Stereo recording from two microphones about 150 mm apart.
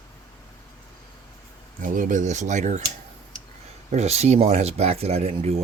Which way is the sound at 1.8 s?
60° right (ahead or behind).